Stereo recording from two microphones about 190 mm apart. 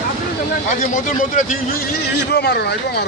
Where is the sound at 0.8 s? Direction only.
45° left (ahead or behind).